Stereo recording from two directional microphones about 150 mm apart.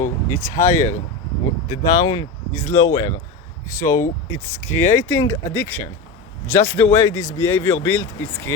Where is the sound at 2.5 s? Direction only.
15° left (ahead or behind).